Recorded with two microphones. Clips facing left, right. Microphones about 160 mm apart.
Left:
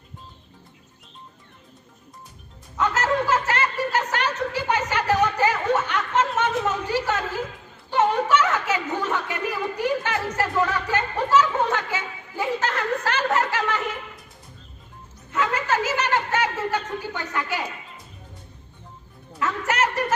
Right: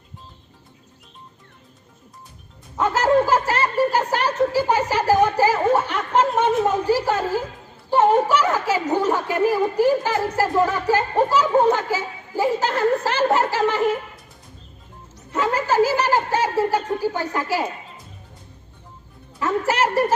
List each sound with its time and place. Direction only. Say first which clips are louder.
2.9 s a woman's voice: right 7 dB; 35° right (ahead or behind)
10.6 s a woman's voice: right 4 dB; 45° right (ahead or behind); by 13.9 s 30° right (ahead or behind)
15.3 s snicker: right 3 dB; 40° right (ahead or behind)
19.5 s a sound: right 4 dB; 35° right (ahead or behind)